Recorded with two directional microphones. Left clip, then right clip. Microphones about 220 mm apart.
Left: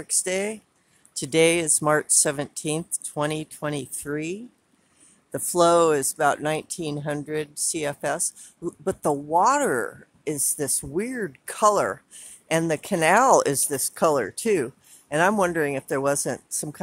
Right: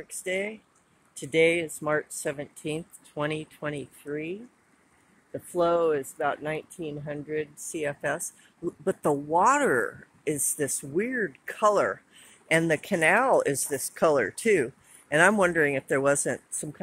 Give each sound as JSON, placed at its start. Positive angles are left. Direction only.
{"t": 0.0, "sound": "speech", "side_deg": 30}